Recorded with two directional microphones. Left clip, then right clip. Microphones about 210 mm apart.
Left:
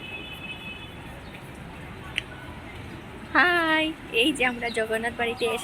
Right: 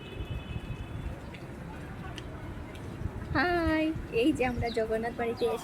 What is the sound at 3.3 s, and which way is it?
A woman's voice, 5° left (ahead or behind).